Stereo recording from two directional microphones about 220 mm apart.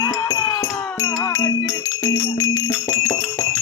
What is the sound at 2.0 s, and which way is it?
Jingle bell, 15° left (ahead or behind).